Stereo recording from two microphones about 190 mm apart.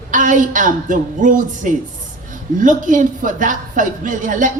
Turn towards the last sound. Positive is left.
turn(degrees=-45)  # may be behind; listen again after turning